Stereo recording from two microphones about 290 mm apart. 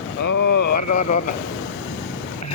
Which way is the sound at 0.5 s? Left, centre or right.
Left.